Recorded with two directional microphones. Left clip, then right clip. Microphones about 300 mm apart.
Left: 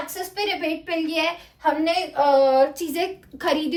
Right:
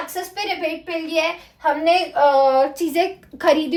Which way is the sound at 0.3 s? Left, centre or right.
Centre.